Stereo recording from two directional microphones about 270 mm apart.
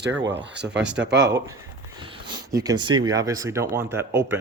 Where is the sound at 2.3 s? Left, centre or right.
Centre.